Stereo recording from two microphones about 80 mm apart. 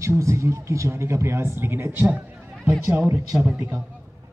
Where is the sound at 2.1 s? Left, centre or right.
Right.